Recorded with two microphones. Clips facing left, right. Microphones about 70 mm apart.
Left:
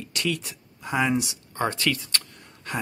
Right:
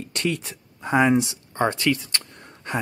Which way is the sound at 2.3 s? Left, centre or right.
Right.